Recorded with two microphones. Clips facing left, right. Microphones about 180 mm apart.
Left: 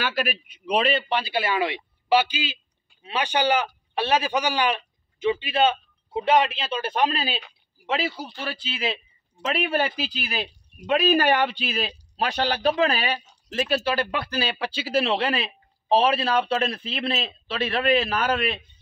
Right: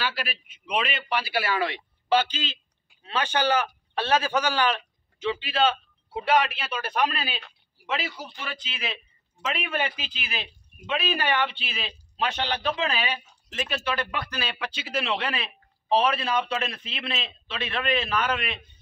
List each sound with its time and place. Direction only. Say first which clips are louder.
0.0 s a man's voice: left 5 dB; 45° left (ahead or behind)